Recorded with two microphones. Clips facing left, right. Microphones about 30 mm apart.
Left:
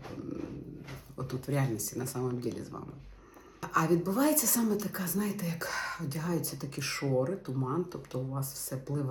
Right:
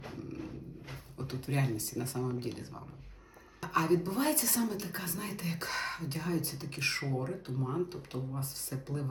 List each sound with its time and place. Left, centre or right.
0.1 s dog: right
3.7 s speech: right